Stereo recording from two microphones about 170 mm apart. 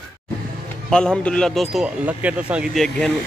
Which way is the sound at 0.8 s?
5° left (ahead or behind).